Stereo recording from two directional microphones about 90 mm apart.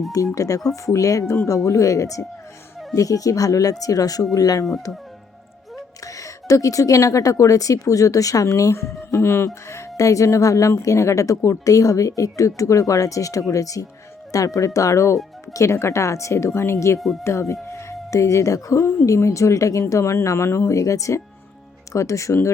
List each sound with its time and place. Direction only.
0.3 s speech: 40° left (ahead or behind)
6.1 s speech: 40° left (ahead or behind)